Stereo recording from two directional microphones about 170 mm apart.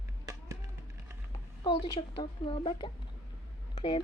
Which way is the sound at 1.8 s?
30° left (ahead or behind).